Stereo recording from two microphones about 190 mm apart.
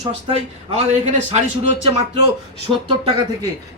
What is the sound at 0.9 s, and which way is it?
Speech, 35° right (ahead or behind).